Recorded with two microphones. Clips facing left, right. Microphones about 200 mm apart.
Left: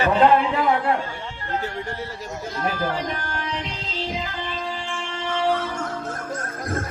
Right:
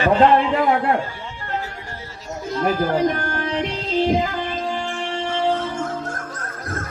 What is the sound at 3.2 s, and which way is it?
Music, 50° right (ahead or behind).